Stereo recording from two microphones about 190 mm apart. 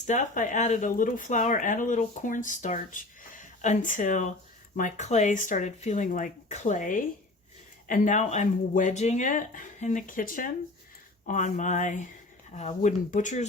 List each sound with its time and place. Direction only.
0.0 s speech: 40° left (ahead or behind)